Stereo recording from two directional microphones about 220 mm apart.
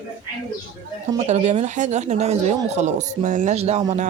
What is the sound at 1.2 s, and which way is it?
Speech, 30° right (ahead or behind).